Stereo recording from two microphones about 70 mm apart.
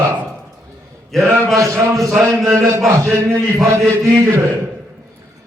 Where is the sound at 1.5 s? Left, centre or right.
Right.